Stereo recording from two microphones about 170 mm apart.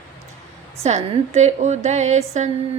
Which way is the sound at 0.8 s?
40° right (ahead or behind).